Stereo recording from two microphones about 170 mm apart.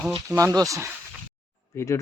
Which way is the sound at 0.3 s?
20° right (ahead or behind).